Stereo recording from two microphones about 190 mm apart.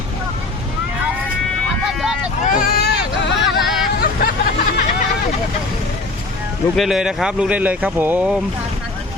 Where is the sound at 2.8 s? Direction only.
60° left (ahead or behind).